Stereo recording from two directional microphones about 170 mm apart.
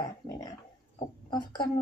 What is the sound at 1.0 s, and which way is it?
Speech, 25° left (ahead or behind).